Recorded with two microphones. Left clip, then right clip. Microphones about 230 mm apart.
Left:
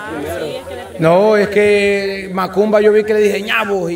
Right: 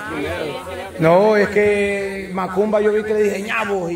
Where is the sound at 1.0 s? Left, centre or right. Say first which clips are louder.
Left 2 dB; centre.